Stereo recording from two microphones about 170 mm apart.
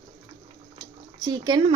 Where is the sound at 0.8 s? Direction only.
25° right (ahead or behind).